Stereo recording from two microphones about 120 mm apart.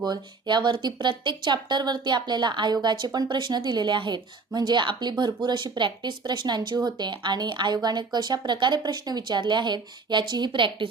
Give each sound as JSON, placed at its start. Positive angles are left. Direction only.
{"t": 0.0, "sound": "a woman's voice", "side_deg": -35}